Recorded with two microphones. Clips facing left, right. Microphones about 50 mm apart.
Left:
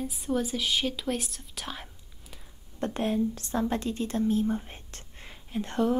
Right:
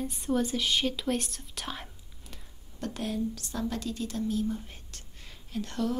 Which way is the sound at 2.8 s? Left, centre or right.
Left.